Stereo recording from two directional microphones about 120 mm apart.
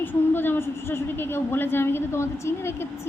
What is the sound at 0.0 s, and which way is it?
A woman's voice, 15° left (ahead or behind).